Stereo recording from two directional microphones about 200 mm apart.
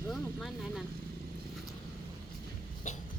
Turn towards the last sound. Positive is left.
turn(degrees=35)  # may be behind; listen again after turning